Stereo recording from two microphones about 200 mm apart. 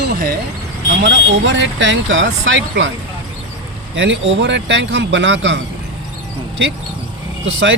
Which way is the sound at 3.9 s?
70° right (ahead or behind).